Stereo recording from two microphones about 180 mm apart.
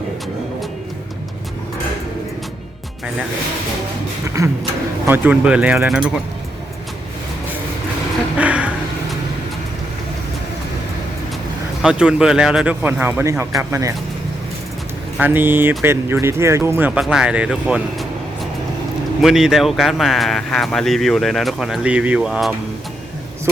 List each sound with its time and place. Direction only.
4.4 s speech: 15° right (ahead or behind)
8.4 s a sound: 10° right (ahead or behind)
11.8 s speech: 5° right (ahead or behind)
15.2 s speech: 10° right (ahead or behind)
19.2 s speech: centre (ahead or behind)